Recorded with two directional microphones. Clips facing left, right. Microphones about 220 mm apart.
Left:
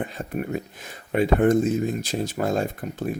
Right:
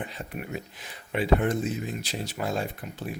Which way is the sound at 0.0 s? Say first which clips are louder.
Left 7 dB; 45° left (ahead or behind).